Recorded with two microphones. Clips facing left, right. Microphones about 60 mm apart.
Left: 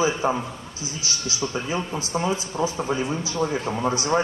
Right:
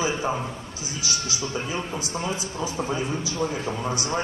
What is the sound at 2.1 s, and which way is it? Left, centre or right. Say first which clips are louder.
Speech: left 6 dB; left.